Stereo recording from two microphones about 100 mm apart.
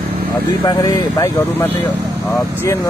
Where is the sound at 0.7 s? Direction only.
35° left (ahead or behind).